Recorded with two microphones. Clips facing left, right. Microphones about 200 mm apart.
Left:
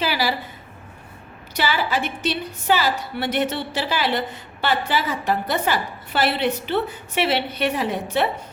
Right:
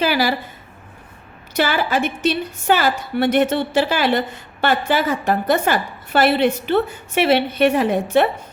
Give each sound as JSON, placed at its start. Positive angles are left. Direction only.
{"t": 0.0, "sound": "a woman's voice", "side_deg": -50}
{"t": 1.5, "sound": "a woman's voice", "side_deg": -50}